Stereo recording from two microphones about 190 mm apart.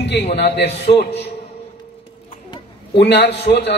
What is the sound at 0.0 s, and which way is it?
A man's voice, 65° left (ahead or behind).